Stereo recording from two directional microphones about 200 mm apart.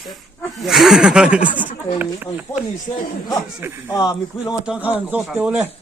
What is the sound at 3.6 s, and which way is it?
Speech, 10° right (ahead or behind).